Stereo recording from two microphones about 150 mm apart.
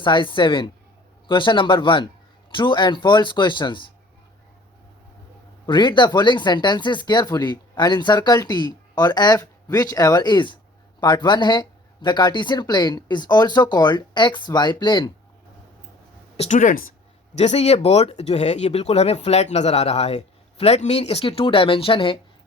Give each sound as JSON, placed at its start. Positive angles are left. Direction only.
{"t": 0.0, "sound": "speech", "side_deg": 30}
{"t": 5.6, "sound": "speech", "side_deg": 30}
{"t": 16.4, "sound": "speech", "side_deg": 55}
{"t": 17.3, "sound": "speech", "side_deg": 50}